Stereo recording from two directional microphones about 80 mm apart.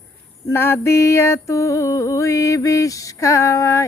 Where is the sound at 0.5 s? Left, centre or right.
Left.